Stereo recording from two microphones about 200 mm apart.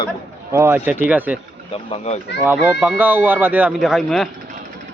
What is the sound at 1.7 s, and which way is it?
Speech, 30° left (ahead or behind).